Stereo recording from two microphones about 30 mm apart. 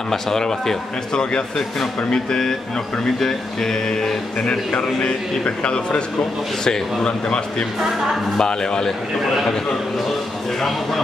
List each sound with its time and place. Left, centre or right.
0.1 s speech: centre
3.2 s speech: centre
4.4 s a man's voice: left
6.6 s a man's voice: left